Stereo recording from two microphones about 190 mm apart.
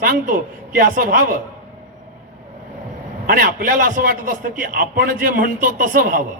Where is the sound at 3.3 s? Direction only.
50° right (ahead or behind).